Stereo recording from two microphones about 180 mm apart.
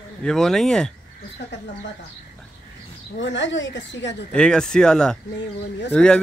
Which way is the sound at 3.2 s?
85° left.